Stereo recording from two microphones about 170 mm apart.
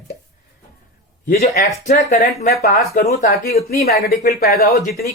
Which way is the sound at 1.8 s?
45° left (ahead or behind).